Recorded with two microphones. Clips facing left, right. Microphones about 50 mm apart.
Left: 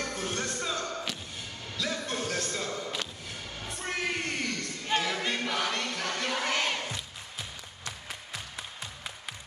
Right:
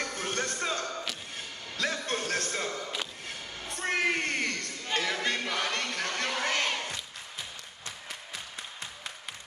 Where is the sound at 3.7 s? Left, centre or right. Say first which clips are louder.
Right 4 dB; right.